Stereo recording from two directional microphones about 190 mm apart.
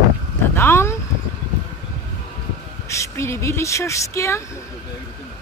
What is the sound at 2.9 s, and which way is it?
Speech, 15° left (ahead or behind).